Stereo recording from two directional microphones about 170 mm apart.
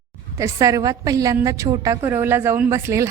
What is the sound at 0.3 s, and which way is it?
A woman's voice, 20° right (ahead or behind).